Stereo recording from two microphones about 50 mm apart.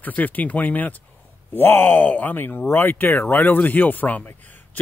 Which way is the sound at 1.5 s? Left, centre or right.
Left.